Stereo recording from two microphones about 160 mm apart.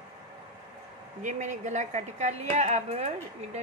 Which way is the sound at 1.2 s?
50° right (ahead or behind).